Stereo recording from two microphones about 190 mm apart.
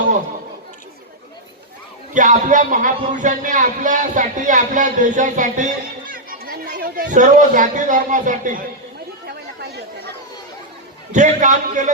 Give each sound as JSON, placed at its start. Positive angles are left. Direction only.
{"t": 2.1, "sound": "a man's voice", "side_deg": -40}
{"t": 9.6, "sound": "chatter", "side_deg": -60}
{"t": 11.1, "sound": "a man's voice", "side_deg": -40}